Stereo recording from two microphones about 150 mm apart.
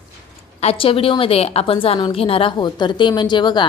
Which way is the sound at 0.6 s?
40° left (ahead or behind).